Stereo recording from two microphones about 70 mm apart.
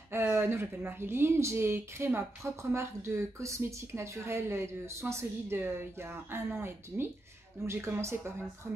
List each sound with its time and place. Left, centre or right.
0.1 s a woman's voice: right